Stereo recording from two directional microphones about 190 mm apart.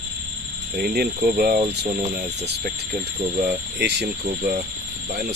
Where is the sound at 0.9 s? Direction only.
55° right (ahead or behind).